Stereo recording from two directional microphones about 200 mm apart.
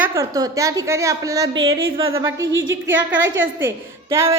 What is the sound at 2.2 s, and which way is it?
A woman's voice, 70° right (ahead or behind).